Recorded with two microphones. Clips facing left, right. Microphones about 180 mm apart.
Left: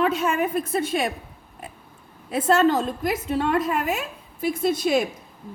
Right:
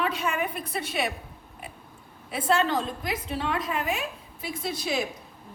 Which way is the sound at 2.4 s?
45° left (ahead or behind).